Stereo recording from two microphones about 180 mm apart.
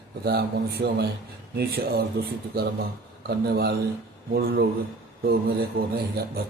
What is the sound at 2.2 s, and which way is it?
A man's voice, 65° right (ahead or behind).